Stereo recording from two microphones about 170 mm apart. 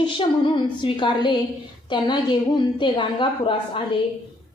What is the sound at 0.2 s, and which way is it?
A woman's voice, 30° left (ahead or behind).